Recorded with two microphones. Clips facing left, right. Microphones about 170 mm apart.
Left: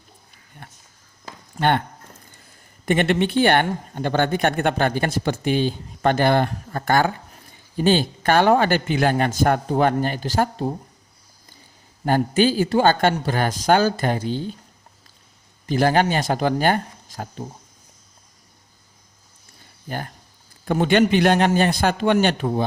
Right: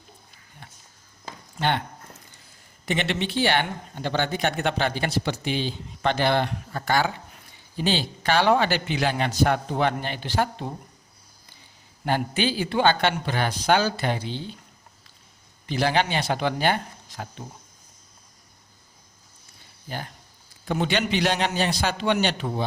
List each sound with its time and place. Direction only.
0.6 s a sound: 55° left (ahead or behind)
1.5 s speech: 50° left (ahead or behind)
2.8 s speech: 50° left (ahead or behind)
12.0 s speech: 45° left (ahead or behind)
15.6 s speech: 45° left (ahead or behind)
19.9 s speech: 50° left (ahead or behind)